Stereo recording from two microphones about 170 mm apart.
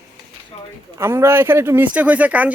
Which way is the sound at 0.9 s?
15° right (ahead or behind).